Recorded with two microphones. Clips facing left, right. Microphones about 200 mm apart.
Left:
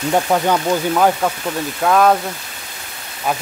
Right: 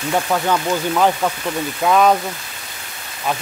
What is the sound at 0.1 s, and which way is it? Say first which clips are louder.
Speech: left 2 dB; 20° left (ahead or behind).